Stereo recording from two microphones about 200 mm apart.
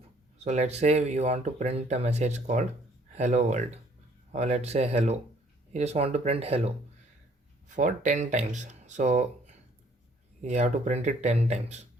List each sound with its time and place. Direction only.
0.3 s speech: 35° right (ahead or behind)
7.8 s speech: 40° right (ahead or behind)
10.4 s speech: 35° right (ahead or behind)